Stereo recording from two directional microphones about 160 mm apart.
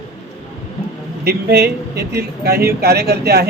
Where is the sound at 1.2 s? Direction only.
75° right (ahead or behind).